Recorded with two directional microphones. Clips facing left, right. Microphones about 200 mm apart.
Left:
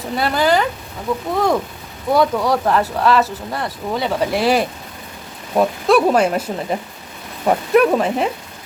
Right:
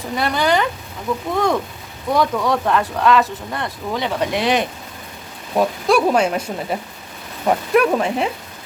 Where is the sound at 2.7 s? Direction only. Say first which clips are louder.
Even; 35° left (ahead or behind).